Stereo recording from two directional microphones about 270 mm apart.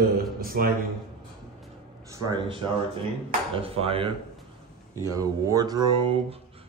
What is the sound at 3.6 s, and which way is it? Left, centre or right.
Speech, right.